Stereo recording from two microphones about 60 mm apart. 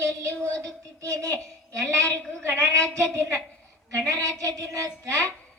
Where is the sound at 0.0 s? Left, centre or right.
Right.